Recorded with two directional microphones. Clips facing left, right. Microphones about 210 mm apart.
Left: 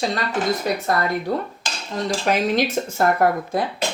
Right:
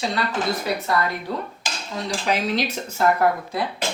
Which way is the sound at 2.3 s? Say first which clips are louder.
Left 3 dB; 50° left (ahead or behind).